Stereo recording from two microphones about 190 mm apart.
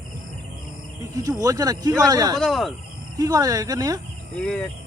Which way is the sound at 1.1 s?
20° right (ahead or behind).